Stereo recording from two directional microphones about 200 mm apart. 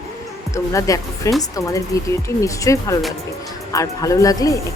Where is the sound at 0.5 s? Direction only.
15° left (ahead or behind).